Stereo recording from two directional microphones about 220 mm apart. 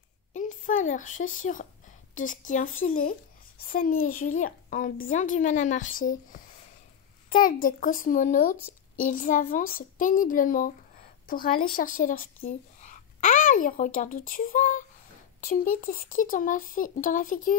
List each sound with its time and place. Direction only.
0.3 s speech: 35° left (ahead or behind)
7.4 s a woman's voice: 35° left (ahead or behind)